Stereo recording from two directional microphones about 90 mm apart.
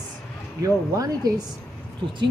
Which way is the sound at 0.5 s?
40° right (ahead or behind).